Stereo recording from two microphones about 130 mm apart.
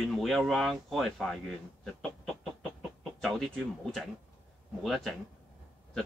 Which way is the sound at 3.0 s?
5° left (ahead or behind).